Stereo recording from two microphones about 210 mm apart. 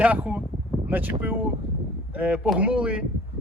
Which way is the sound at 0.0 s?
5° right (ahead or behind).